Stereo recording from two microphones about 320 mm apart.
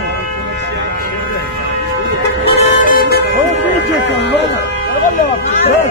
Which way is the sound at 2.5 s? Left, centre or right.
Left.